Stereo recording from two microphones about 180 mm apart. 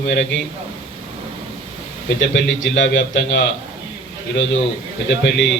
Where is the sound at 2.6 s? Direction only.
90° left.